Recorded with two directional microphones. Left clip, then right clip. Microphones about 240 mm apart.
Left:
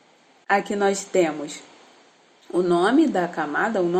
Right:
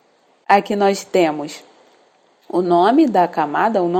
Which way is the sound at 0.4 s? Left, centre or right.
Right.